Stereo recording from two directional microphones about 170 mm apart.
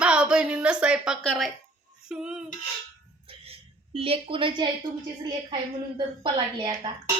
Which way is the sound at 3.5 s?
35° right (ahead or behind).